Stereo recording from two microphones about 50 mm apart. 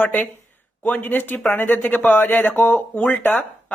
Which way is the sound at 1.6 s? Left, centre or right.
Left.